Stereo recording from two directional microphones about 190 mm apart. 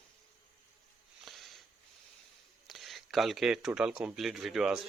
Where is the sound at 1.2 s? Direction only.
Centre (ahead or behind).